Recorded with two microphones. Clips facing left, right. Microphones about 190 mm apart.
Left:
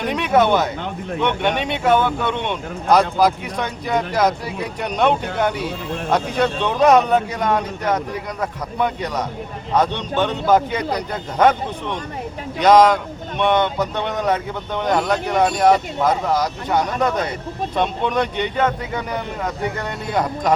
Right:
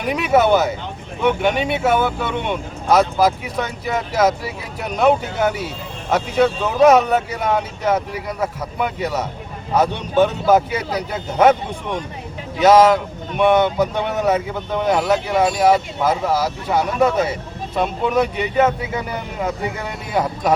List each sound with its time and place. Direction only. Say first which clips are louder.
0.0 s speech: right 1 dB; 5° right (ahead or behind)
12.5 s speech: right 1 dB; 5° right (ahead or behind)